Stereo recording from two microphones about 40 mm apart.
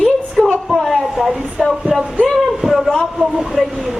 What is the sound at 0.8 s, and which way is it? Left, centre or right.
Speech, centre.